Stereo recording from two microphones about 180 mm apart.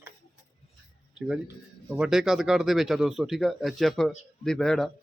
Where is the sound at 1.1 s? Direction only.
5° right (ahead or behind).